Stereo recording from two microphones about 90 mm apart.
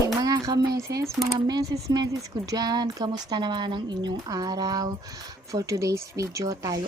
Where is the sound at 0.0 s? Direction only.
40° right (ahead or behind).